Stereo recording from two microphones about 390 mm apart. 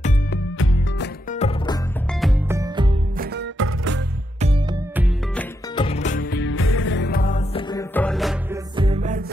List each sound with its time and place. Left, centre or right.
0.0 s music: left
2.2 s music: centre
3.2 s music: right
5.8 s music: centre
8.7 s music: centre